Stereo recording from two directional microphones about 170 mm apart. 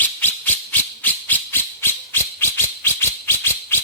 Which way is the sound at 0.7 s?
10° left (ahead or behind).